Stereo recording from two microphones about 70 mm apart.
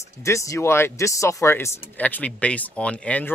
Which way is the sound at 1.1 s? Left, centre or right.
Left.